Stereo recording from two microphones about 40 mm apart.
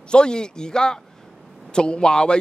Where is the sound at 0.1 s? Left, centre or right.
Left.